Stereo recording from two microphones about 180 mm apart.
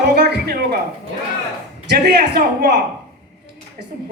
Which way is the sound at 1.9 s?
65° right (ahead or behind).